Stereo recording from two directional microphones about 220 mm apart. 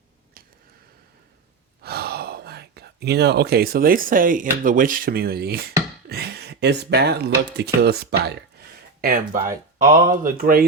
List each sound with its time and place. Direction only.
1.8 s speech: 45° right (ahead or behind)